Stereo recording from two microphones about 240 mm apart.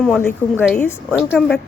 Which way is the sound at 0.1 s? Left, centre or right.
Centre.